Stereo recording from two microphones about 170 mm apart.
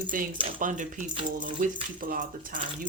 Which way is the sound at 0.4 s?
50° right (ahead or behind).